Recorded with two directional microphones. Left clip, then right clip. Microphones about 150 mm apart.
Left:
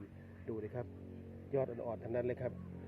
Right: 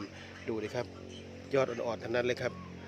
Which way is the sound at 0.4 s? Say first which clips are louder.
Right 7 dB; 35° right (ahead or behind).